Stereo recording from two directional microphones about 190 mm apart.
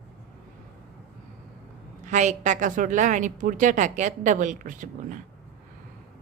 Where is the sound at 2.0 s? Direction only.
40° right (ahead or behind).